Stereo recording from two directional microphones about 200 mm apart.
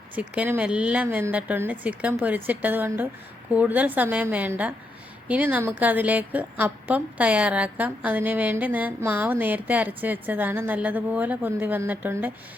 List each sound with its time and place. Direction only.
0.2 s a woman's voice: 10° right (ahead or behind)